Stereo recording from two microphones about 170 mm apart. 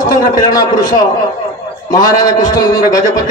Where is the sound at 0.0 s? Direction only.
20° left (ahead or behind).